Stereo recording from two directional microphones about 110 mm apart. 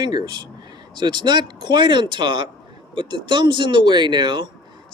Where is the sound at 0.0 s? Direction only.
40° right (ahead or behind).